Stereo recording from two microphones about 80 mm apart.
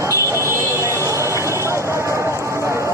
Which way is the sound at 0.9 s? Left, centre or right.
Left.